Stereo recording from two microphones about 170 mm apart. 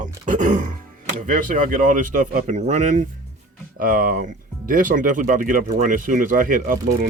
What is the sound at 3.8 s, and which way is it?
Speech, 55° right (ahead or behind).